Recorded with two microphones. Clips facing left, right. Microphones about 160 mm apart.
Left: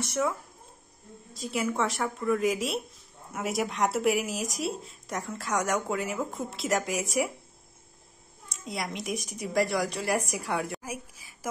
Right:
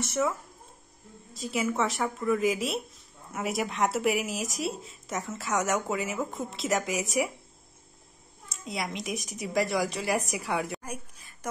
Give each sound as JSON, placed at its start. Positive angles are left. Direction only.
{"t": 0.0, "sound": "speech", "side_deg": 0}
{"t": 8.6, "sound": "speech", "side_deg": 0}